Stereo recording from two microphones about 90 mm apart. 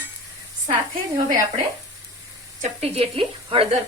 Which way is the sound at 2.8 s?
85° right.